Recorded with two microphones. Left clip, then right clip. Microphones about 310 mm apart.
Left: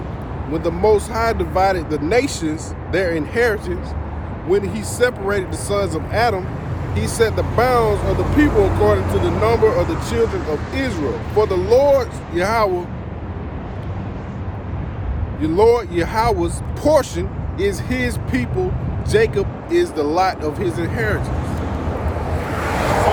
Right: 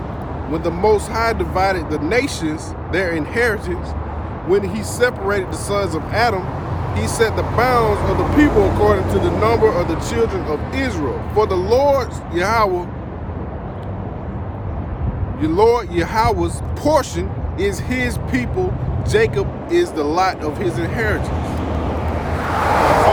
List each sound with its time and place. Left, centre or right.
0.5 s speech: centre
7.9 s speech: right
9.6 s speech: centre
15.4 s speech: centre
22.2 s a sound: centre